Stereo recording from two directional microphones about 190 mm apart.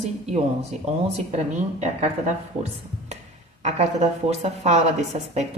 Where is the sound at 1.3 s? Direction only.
35° right (ahead or behind).